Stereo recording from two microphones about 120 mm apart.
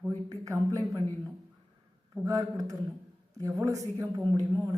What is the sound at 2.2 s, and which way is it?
A man's voice, 30° right (ahead or behind).